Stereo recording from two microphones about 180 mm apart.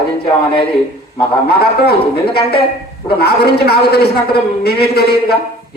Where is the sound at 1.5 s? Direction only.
60° left (ahead or behind).